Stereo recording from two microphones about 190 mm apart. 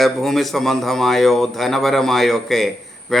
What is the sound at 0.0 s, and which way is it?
A man's voice, centre (ahead or behind).